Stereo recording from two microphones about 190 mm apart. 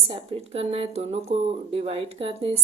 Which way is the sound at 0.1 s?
30° right (ahead or behind).